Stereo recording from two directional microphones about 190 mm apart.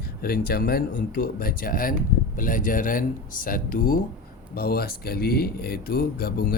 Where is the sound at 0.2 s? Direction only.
50° left (ahead or behind).